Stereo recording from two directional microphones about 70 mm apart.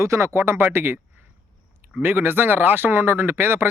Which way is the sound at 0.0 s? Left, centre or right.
Right.